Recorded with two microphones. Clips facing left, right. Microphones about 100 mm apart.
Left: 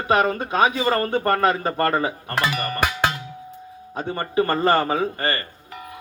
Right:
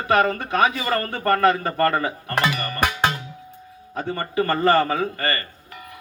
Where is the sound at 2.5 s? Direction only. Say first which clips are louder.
Left 3 dB; 15° left (ahead or behind).